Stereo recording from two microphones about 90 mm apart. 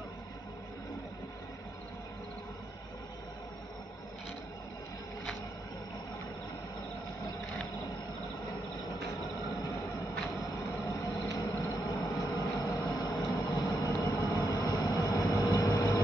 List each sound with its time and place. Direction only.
10.9 s vehicle: 40° left (ahead or behind)
12.8 s vehicle: 45° left (ahead or behind)